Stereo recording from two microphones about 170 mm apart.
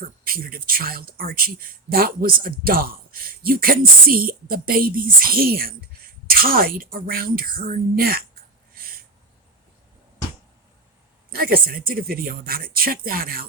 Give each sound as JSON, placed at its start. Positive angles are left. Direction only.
{"t": 0.0, "sound": "speech", "side_deg": -60}
{"t": 8.7, "sound": "a sound", "side_deg": -60}
{"t": 11.3, "sound": "speech", "side_deg": -60}